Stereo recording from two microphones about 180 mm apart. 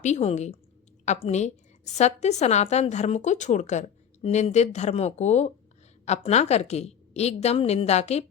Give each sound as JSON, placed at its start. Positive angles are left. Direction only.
{"t": 0.0, "sound": "a woman's voice", "side_deg": 35}